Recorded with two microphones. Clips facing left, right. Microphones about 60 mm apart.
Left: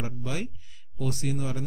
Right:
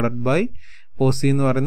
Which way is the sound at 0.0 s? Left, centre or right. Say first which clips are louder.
Right 14 dB; right.